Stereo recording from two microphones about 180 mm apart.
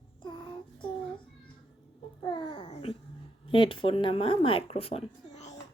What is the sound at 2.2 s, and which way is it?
Babbling, 25° left (ahead or behind).